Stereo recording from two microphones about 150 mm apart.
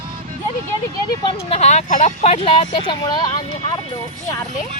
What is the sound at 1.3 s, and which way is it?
Speech, 45° left (ahead or behind).